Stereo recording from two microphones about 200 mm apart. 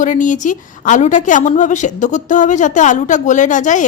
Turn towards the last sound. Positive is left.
turn(degrees=40)  # may be behind; listen again after turning